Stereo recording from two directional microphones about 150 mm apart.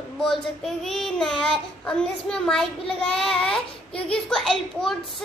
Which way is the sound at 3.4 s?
35° left (ahead or behind).